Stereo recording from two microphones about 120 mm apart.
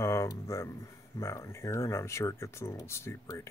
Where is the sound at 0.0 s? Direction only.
25° left (ahead or behind).